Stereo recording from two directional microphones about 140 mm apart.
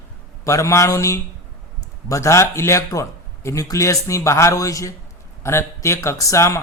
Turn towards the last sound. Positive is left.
turn(degrees=20)  # may be behind; listen again after turning